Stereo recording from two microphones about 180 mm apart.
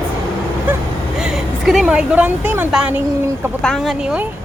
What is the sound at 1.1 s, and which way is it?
A woman's voice, centre (ahead or behind).